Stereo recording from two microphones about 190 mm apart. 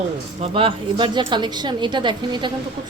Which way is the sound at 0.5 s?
25° right (ahead or behind).